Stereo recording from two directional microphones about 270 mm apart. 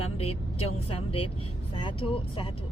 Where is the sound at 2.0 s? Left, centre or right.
Centre.